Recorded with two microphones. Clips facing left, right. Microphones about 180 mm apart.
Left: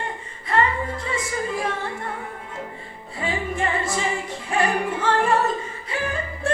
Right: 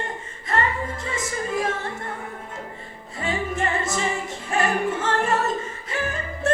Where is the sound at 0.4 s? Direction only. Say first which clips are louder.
Left 3 dB; 45° right (ahead or behind).